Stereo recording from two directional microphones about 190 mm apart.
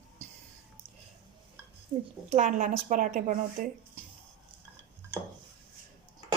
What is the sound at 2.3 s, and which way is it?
Speech, 40° right (ahead or behind).